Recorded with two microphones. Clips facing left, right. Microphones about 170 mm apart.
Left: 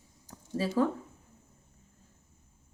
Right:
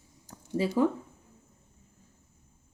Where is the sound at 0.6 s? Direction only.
15° right (ahead or behind).